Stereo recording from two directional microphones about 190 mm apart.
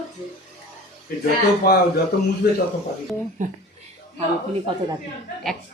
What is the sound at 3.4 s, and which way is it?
Speech, 40° right (ahead or behind).